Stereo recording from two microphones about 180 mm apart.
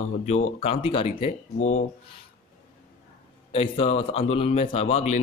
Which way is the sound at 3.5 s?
30° left (ahead or behind).